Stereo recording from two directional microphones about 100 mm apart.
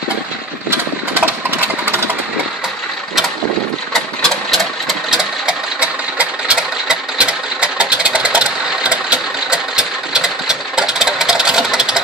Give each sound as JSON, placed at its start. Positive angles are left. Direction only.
{"t": 0.7, "sound": "engine", "side_deg": -20}
{"t": 3.9, "sound": "engine", "side_deg": 0}